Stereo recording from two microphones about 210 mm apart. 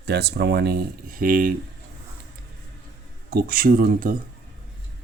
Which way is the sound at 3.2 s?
45° right (ahead or behind).